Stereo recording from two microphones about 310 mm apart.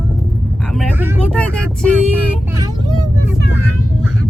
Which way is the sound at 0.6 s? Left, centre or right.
Centre.